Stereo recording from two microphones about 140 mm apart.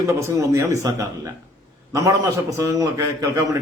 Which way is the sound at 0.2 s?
20° right (ahead or behind).